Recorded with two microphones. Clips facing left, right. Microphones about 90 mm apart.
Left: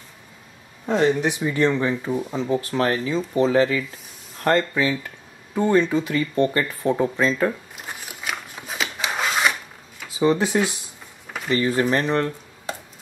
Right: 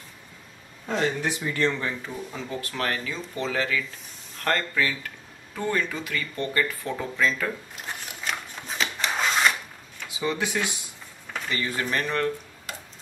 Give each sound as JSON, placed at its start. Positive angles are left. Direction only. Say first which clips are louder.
{"t": 0.8, "sound": "speech", "louder": "left 7 dB", "side_deg": 20}
{"t": 7.8, "sound": "filing", "louder": "left 1 dB", "side_deg": 5}
{"t": 10.0, "sound": "speech", "louder": "left 8 dB", "side_deg": 35}
{"t": 11.5, "sound": "speech", "louder": "left 8 dB", "side_deg": 20}